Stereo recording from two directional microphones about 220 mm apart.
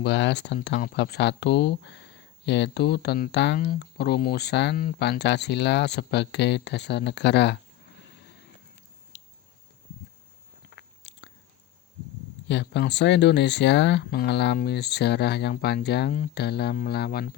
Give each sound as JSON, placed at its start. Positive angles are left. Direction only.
{"t": 0.0, "sound": "speech", "side_deg": 50}
{"t": 8.0, "sound": "vehicle", "side_deg": 50}
{"t": 10.8, "sound": "biting", "side_deg": 55}
{"t": 12.5, "sound": "speech", "side_deg": 55}